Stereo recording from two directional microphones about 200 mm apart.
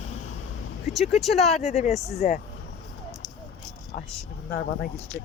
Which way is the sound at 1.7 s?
35° left (ahead or behind).